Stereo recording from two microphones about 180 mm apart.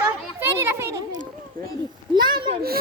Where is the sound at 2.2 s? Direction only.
25° right (ahead or behind).